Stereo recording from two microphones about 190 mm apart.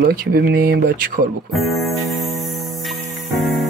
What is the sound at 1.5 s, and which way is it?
Speech, centre (ahead or behind).